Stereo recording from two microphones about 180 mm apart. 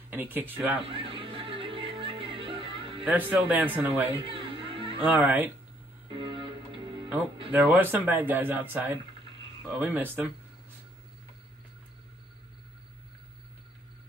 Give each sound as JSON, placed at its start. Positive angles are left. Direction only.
{"t": 0.1, "sound": "speech", "side_deg": -10}
{"t": 0.8, "sound": "music", "side_deg": -30}
{"t": 3.1, "sound": "speech", "side_deg": -10}
{"t": 4.1, "sound": "music", "side_deg": -30}
{"t": 5.0, "sound": "speech", "side_deg": -10}
{"t": 6.0, "sound": "music", "side_deg": -30}
{"t": 7.5, "sound": "speech", "side_deg": -10}